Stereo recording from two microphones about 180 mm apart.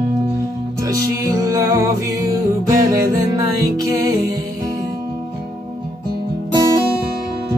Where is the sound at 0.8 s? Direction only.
20° right (ahead or behind).